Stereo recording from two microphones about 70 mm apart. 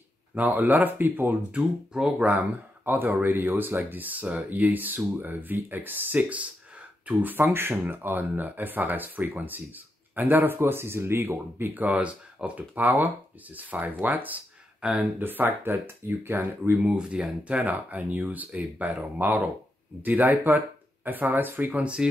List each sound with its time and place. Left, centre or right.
0.3 s speech: right
1.5 s speech: centre
2.3 s speech: right
14.8 s speech: centre
15.1 s speech: right
16.7 s speech: centre